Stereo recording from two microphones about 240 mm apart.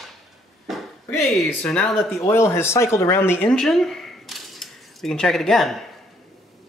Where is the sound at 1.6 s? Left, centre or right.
Centre.